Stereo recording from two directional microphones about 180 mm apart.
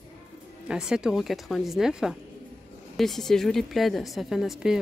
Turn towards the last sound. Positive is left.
turn(degrees=0)  # may be behind; listen again after turning